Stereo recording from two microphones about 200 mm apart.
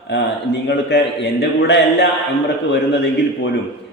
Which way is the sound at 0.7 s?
60° left (ahead or behind).